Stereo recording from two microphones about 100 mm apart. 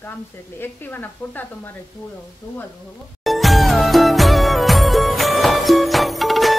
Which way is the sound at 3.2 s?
Centre (ahead or behind).